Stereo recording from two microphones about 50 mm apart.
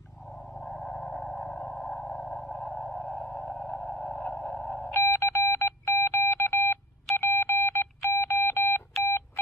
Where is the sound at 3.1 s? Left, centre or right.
Left.